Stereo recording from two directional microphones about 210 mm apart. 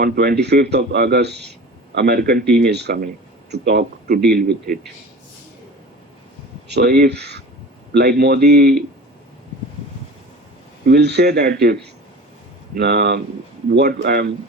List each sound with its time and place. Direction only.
0.0 s a man's voice: 50° right (ahead or behind)
6.7 s a man's voice: 50° right (ahead or behind)
10.8 s a man's voice: 55° right (ahead or behind)